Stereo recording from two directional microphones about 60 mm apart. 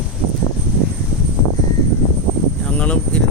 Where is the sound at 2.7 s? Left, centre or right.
Left.